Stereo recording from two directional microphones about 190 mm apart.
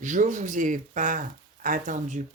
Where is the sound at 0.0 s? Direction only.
40° right (ahead or behind).